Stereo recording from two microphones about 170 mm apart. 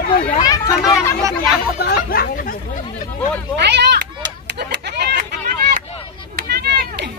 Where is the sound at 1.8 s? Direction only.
60° left (ahead or behind).